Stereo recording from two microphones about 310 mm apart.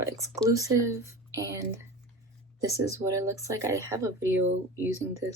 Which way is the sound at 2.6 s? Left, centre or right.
Centre.